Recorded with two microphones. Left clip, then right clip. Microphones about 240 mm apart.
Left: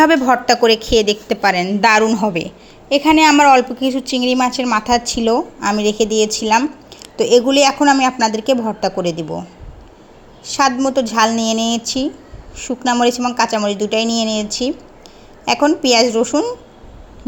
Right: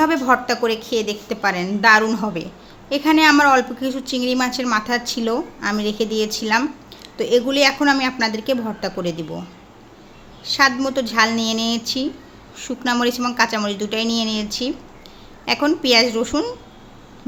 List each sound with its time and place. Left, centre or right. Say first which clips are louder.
0.0 s a woman's voice: left 5 dB; centre
10.4 s a woman's voice: left 2 dB; centre